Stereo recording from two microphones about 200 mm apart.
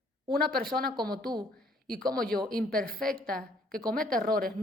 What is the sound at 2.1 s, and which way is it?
A woman's voice, 45° right (ahead or behind).